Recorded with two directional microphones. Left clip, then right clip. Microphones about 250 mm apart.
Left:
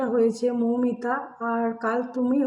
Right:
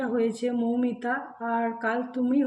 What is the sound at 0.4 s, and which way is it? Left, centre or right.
Speech, centre.